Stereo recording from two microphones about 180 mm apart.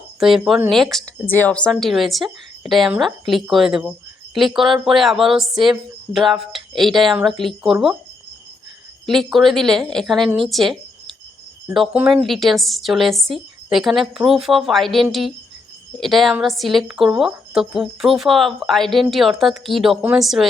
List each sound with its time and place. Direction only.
0.2 s a woman's voice: centre (ahead or behind)
9.0 s a woman's voice: centre (ahead or behind)